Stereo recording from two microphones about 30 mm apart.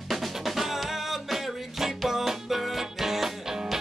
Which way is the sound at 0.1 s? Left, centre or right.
Centre.